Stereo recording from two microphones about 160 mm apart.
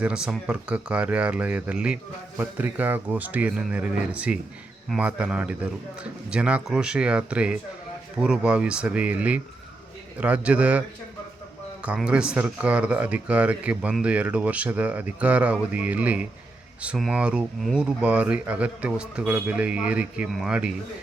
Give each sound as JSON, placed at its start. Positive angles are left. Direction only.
{"t": 0.0, "sound": "speech", "side_deg": -5}